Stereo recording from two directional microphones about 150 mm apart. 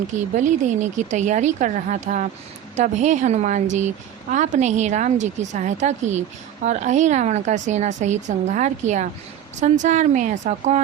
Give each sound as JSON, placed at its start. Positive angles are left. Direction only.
{"t": 0.3, "sound": "a woman's voice", "side_deg": -55}